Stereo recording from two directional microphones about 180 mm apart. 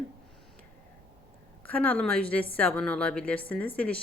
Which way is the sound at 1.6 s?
10° left (ahead or behind).